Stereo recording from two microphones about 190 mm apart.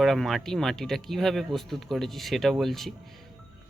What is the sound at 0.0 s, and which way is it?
Speech, centre (ahead or behind).